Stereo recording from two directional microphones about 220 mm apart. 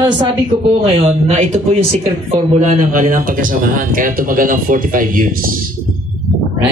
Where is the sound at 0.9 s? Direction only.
30° right (ahead or behind).